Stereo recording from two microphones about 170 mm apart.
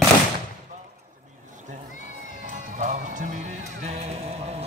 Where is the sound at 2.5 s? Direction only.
45° right (ahead or behind).